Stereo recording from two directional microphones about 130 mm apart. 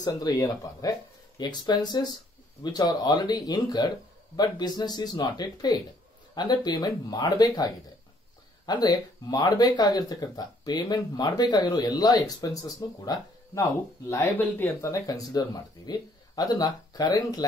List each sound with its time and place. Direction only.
0.0 s speech: 30° left (ahead or behind)